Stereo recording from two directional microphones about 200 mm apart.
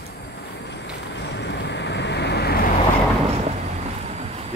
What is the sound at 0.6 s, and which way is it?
Vehicle, 60° left (ahead or behind).